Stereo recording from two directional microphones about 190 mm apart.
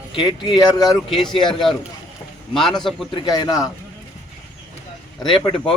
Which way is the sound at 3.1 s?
20° left (ahead or behind).